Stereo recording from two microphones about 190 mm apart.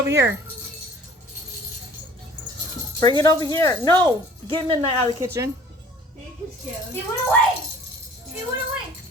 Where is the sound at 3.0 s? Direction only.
20° left (ahead or behind).